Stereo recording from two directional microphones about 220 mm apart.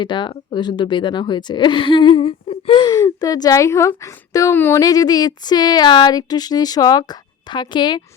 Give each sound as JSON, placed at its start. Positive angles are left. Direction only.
{"t": 0.0, "sound": "a woman's voice", "side_deg": 20}